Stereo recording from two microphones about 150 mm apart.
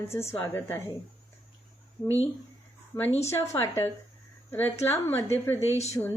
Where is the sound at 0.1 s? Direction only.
15° left (ahead or behind).